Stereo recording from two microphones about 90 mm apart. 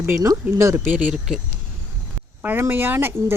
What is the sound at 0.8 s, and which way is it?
Speech, 15° right (ahead or behind).